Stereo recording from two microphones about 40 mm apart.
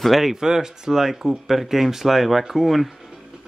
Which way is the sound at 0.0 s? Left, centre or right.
Centre.